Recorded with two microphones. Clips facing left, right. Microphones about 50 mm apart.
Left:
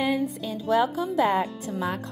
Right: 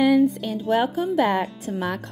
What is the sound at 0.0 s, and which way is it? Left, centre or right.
Music, right.